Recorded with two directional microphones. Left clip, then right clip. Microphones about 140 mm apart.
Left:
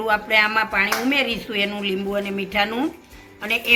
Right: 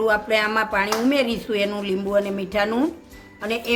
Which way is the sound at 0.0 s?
90° right.